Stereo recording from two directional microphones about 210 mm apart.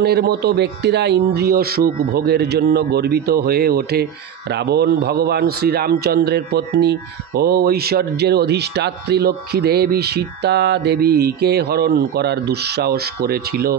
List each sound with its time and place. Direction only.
0.0 s speech: 50° right (ahead or behind)